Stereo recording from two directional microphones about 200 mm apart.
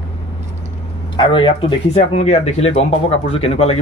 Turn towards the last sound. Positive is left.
turn(degrees=30)  # may be behind; listen again after turning